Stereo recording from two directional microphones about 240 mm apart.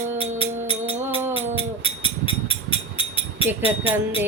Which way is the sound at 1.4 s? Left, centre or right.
Left.